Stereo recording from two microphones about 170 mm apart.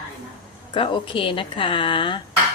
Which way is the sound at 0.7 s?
30° left (ahead or behind).